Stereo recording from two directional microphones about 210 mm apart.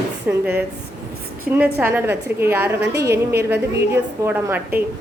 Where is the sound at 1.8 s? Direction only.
10° right (ahead or behind).